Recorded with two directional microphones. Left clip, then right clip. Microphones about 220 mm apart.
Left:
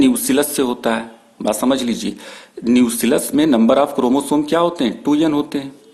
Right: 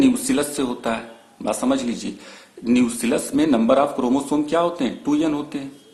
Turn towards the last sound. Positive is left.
turn(degrees=40)  # may be behind; listen again after turning